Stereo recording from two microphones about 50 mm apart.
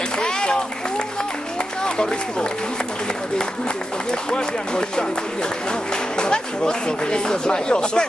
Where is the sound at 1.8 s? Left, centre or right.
Centre.